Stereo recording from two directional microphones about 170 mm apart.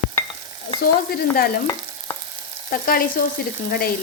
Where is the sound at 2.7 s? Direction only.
55° left (ahead or behind).